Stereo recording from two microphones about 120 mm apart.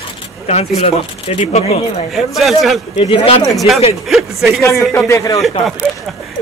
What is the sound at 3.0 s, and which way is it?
Speech, 50° left (ahead or behind).